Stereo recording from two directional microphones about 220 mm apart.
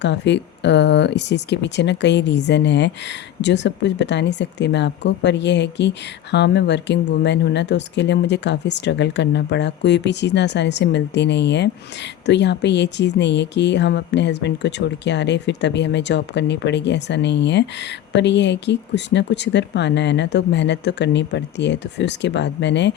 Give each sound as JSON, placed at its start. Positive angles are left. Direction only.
{"t": 0.0, "sound": "speech", "side_deg": 50}